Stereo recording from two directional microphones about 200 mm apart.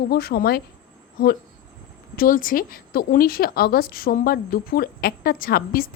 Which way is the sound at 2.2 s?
45° left (ahead or behind).